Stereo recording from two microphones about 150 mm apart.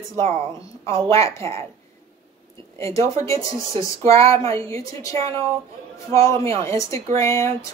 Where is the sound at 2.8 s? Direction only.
20° left (ahead or behind).